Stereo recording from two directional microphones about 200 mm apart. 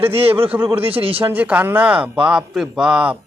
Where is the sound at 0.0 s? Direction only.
30° right (ahead or behind).